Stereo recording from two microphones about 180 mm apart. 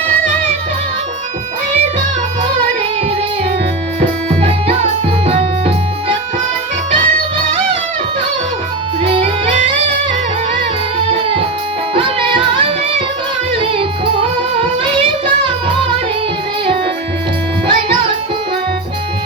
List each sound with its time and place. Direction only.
4.4 s music: 35° right (ahead or behind)
11.1 s music: 30° right (ahead or behind)
17.7 s music: 25° right (ahead or behind)